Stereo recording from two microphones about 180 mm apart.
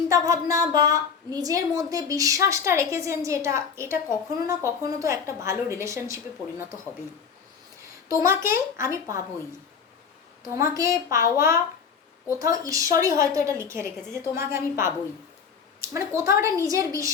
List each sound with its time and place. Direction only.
0.1 s a woman's voice: 15° right (ahead or behind)
7.8 s speech: 15° right (ahead or behind)
10.5 s a woman's voice: 20° right (ahead or behind)